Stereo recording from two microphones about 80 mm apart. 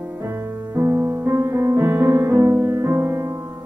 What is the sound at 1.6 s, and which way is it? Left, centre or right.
Music, right.